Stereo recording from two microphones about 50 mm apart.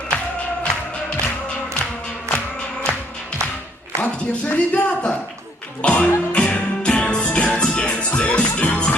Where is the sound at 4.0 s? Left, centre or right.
Left.